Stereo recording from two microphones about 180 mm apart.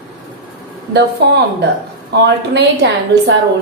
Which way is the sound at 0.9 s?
70° right (ahead or behind).